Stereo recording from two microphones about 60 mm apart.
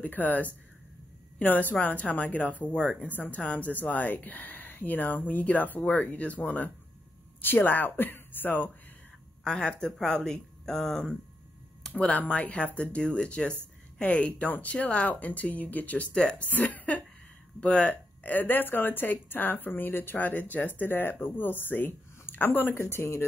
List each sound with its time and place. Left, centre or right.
0.0 s a woman's voice: left
2.6 s speech: centre
3.1 s a woman's voice: left
9.4 s speech: centre
11.8 s a sound: centre
12.2 s a woman's voice: left
16.1 s speech: centre
16.4 s a woman's voice: left